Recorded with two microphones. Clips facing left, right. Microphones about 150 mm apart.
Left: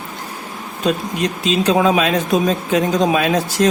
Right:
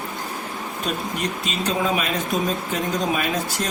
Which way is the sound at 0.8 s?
90° left.